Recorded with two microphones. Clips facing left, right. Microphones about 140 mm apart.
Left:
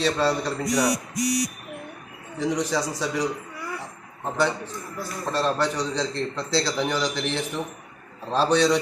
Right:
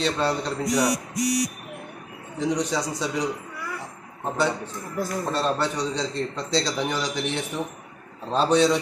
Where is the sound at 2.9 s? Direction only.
20° right (ahead or behind).